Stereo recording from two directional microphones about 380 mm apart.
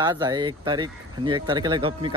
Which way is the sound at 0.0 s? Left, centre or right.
Centre.